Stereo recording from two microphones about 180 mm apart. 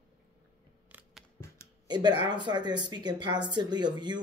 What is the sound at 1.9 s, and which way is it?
Speech, 25° right (ahead or behind).